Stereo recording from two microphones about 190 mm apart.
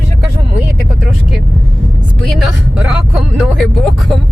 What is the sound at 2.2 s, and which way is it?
Speech, centre (ahead or behind).